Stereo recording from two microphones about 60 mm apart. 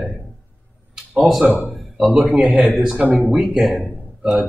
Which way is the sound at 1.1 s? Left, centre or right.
Centre.